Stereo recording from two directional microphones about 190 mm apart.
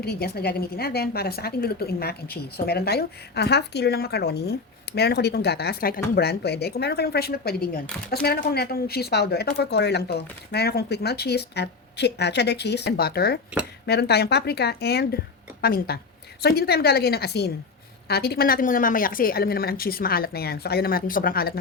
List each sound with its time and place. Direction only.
0.0 s a woman's voice: 55° left (ahead or behind)